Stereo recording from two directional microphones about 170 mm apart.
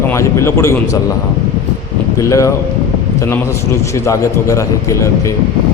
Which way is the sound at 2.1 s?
20° left (ahead or behind).